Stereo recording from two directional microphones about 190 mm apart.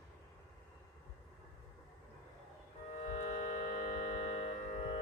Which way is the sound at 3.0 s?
40° left (ahead or behind).